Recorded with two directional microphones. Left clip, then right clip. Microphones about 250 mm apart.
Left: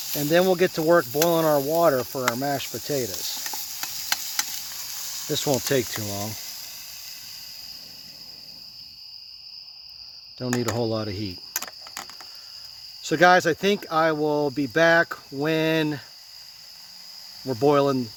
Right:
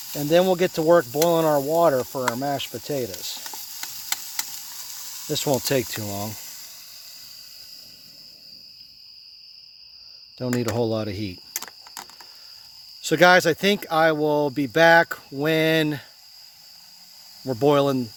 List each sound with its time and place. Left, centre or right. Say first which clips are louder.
0.2 s speech: right 1 dB; right
3.3 s stir: left 3 dB; centre
5.3 s speech: right 1 dB; right
5.8 s speech: even; centre
10.6 s speech: right 2 dB; right
11.5 s a sound: left 2 dB; centre
13.0 s speech: right 2 dB; right
17.4 s speech: right 1 dB; right